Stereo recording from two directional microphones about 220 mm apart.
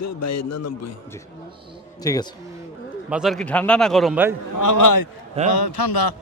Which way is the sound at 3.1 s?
Centre (ahead or behind).